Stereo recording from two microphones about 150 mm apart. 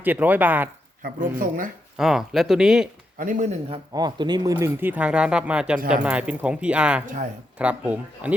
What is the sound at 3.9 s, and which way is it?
A man's voice, 30° right (ahead or behind).